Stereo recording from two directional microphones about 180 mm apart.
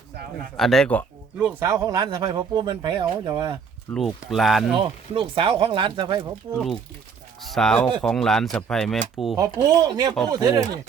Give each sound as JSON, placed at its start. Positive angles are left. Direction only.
{"t": 0.5, "sound": "speech", "side_deg": 0}
{"t": 1.4, "sound": "speech", "side_deg": -5}
{"t": 1.6, "sound": "speech", "side_deg": -20}
{"t": 3.9, "sound": "speech", "side_deg": 0}
{"t": 4.8, "sound": "speech", "side_deg": -30}
{"t": 7.4, "sound": "speech", "side_deg": 0}
{"t": 9.4, "sound": "speech", "side_deg": -20}